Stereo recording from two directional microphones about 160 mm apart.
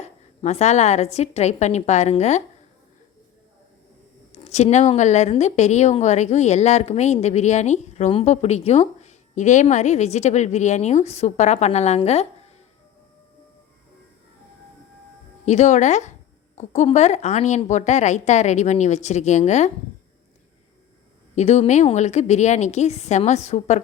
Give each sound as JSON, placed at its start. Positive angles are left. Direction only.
{"t": 0.0, "sound": "a woman's voice", "side_deg": 45}
{"t": 4.3, "sound": "a woman's voice", "side_deg": 45}
{"t": 15.4, "sound": "a woman's voice", "side_deg": 45}
{"t": 21.3, "sound": "a woman's voice", "side_deg": 40}